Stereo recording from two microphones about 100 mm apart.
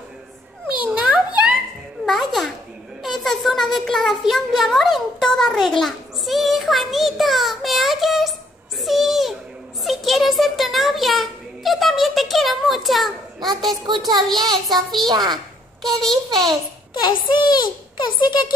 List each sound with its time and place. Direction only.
0.8 s a sound: 15° right (ahead or behind)
2.0 s a sound: centre (ahead or behind)
3.0 s a child's voice: centre (ahead or behind)
15.0 s a woman's voice: 45° right (ahead or behind)
15.8 s a child's voice: 5° left (ahead or behind)
17.0 s a child's voice: 45° left (ahead or behind)